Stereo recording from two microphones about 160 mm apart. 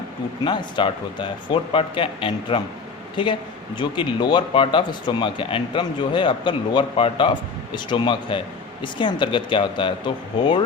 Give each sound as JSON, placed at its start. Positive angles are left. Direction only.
{"t": 0.4, "sound": "speech", "side_deg": 30}